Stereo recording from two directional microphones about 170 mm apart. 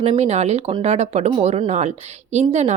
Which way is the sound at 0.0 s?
40° right (ahead or behind).